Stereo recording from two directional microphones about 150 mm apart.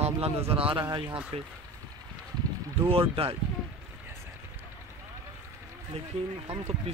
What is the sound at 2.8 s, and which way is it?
Speech, 40° right (ahead or behind).